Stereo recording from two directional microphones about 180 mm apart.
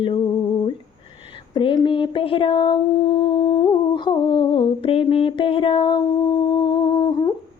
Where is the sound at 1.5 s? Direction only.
25° left (ahead or behind).